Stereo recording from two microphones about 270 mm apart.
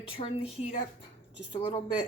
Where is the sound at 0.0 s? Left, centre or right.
Left.